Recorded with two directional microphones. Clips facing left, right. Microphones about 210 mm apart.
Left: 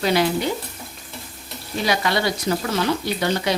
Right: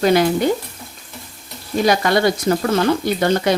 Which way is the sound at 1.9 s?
50° right (ahead or behind).